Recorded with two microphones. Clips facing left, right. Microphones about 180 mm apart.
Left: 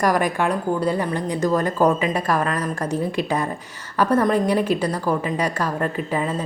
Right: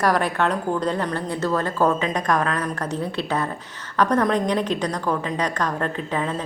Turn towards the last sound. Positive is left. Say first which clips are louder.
# left 2 dB
turn(degrees=5)  # may be behind; listen again after turning